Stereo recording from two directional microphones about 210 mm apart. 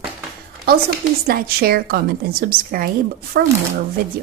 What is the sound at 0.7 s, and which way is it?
Speech, 45° right (ahead or behind).